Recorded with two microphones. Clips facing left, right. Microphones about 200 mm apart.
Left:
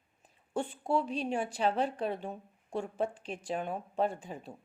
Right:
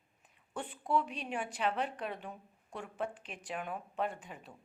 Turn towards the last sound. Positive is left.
turn(degrees=30)  # may be behind; listen again after turning